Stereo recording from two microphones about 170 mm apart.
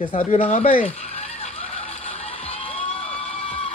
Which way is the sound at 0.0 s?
50° left (ahead or behind).